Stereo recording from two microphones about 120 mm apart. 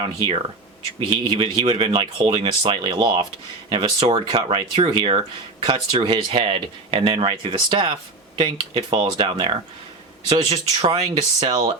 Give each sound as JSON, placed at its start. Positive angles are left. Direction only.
{"t": 0.0, "sound": "speech", "side_deg": -45}